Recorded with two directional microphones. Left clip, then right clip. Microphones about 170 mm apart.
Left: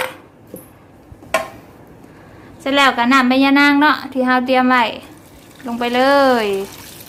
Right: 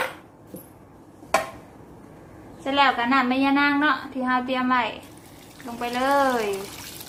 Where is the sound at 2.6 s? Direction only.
70° left (ahead or behind).